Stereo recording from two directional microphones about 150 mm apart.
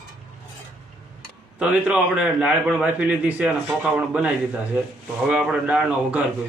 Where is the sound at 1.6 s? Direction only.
5° right (ahead or behind).